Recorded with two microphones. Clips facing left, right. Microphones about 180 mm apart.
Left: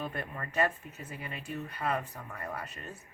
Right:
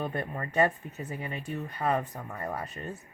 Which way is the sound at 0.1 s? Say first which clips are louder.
Right 5 dB; 35° right (ahead or behind).